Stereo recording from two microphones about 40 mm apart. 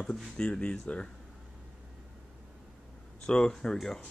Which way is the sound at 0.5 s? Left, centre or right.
Left.